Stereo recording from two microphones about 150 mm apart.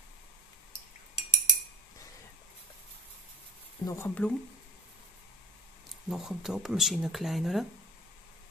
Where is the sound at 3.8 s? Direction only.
20° left (ahead or behind).